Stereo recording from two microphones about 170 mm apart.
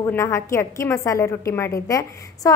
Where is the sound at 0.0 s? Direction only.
15° left (ahead or behind).